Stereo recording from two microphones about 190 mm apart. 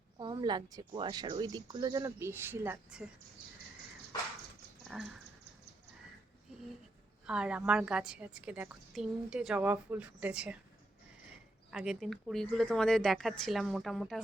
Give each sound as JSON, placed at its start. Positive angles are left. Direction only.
{"t": 0.2, "sound": "a woman's voice", "side_deg": -20}
{"t": 4.9, "sound": "a woman's voice", "side_deg": 0}
{"t": 7.3, "sound": "a woman's voice", "side_deg": -5}
{"t": 11.7, "sound": "a woman's voice", "side_deg": -5}